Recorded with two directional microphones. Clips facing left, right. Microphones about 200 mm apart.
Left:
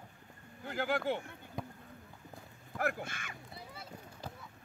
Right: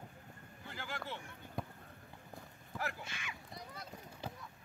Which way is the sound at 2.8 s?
55° left (ahead or behind).